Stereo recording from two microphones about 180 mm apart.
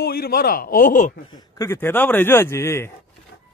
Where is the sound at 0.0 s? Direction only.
55° left (ahead or behind).